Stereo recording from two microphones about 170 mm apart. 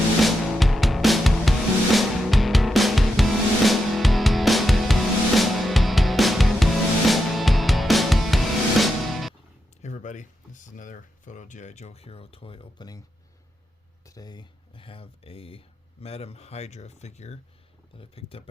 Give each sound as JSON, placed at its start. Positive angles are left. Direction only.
{"t": 0.2, "sound": "music", "side_deg": 0}
{"t": 9.8, "sound": "a sound", "side_deg": 45}
{"t": 14.0, "sound": "speech", "side_deg": 20}